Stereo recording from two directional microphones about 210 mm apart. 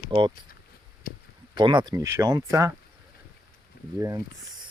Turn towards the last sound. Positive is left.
turn(degrees=-15)  # may be behind; listen again after turning